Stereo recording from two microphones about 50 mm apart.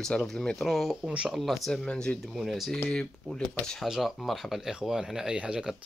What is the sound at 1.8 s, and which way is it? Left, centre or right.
Speech, centre.